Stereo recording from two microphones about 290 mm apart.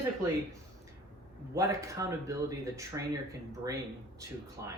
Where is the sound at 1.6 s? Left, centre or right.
Centre.